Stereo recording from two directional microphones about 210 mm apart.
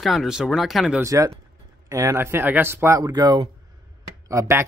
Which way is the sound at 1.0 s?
15° right (ahead or behind).